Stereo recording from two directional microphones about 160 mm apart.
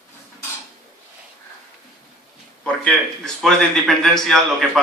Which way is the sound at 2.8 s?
5° left (ahead or behind).